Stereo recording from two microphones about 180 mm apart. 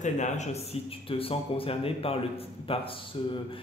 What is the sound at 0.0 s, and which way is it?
A man's voice, 40° left (ahead or behind).